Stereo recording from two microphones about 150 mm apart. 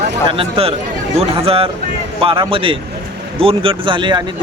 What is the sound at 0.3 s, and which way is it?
Speech, 40° right (ahead or behind).